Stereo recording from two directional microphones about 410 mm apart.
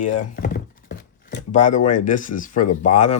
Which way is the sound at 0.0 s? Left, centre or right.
Centre.